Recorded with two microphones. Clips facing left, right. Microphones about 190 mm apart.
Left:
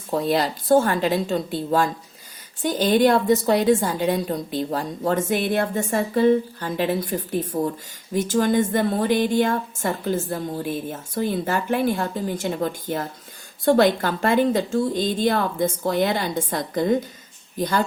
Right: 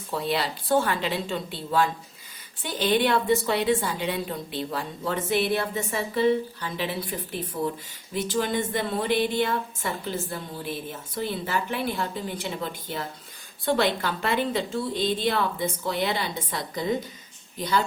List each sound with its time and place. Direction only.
0.1 s a woman's voice: 45° left (ahead or behind)